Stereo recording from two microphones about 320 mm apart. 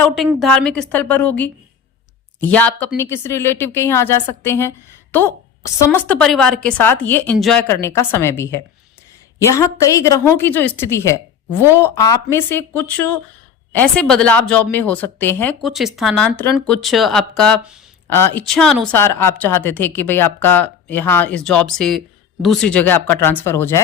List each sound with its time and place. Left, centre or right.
0.0 s a woman's voice: centre
5.8 s a woman's voice: centre